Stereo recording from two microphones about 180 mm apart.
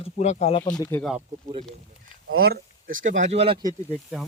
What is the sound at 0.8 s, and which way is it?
Speech, 15° left (ahead or behind).